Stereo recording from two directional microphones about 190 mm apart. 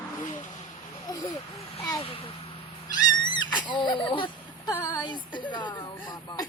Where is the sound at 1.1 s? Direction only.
20° left (ahead or behind).